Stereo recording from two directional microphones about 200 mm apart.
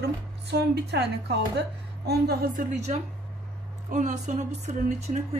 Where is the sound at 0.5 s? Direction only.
55° right (ahead or behind).